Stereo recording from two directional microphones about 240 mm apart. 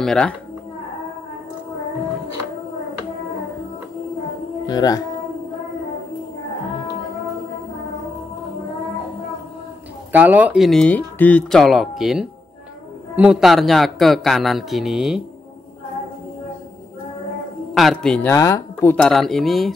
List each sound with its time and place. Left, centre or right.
0.0 s speech: centre
4.6 s speech: centre
10.1 s speech: centre
17.7 s speech: centre